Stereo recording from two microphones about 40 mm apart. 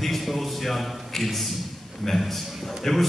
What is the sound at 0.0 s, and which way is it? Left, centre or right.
A man's voice, centre.